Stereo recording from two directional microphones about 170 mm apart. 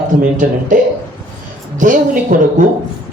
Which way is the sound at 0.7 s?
50° right (ahead or behind).